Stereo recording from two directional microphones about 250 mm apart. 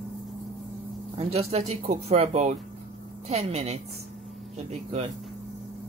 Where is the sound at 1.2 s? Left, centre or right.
Right.